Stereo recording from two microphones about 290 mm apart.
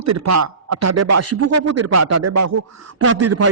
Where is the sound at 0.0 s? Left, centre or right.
Right.